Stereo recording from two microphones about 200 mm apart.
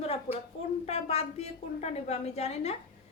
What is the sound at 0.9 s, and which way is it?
A woman's voice, 30° left (ahead or behind).